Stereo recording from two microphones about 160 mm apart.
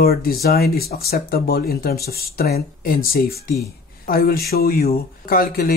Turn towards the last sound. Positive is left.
turn(degrees=70)  # may be behind; listen again after turning